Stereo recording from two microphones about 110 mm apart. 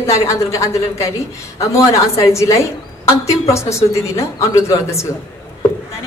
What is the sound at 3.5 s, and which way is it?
Speech, 25° left (ahead or behind).